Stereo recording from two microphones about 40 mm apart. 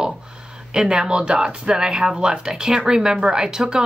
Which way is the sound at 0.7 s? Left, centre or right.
Centre.